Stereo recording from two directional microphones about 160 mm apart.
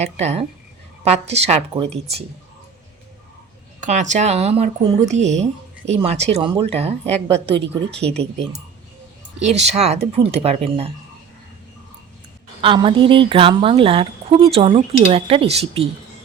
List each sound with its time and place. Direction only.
0.0 s speech: 45° right (ahead or behind)
3.8 s speech: 50° right (ahead or behind)
7.6 s speech: 90° right
9.4 s speech: 40° right (ahead or behind)
12.6 s speech: 30° right (ahead or behind)